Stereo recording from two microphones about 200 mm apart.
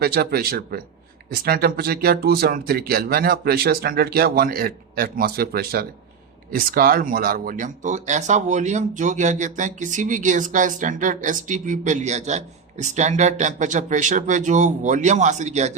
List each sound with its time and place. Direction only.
0.0 s speech: 50° right (ahead or behind); by 15.7 s 35° right (ahead or behind)